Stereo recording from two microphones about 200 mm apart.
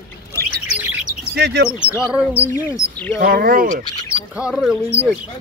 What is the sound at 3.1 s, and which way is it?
Speech, 50° right (ahead or behind).